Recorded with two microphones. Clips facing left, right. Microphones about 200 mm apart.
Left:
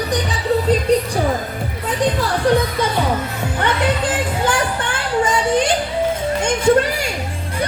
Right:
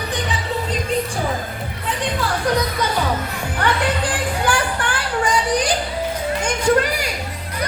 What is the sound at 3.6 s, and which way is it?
Music, 20° left (ahead or behind).